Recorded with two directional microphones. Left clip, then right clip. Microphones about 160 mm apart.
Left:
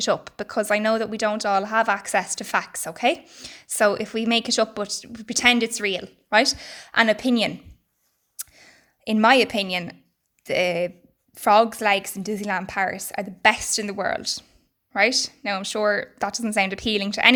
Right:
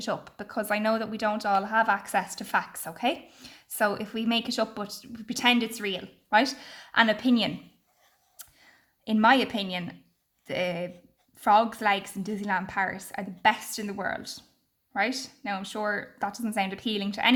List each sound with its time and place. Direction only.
0.0 s speech: 45° left (ahead or behind)
8.4 s a sound: 45° left (ahead or behind)
10.4 s speech: 45° left (ahead or behind)